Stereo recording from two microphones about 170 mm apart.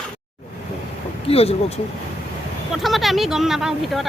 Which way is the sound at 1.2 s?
35° left (ahead or behind).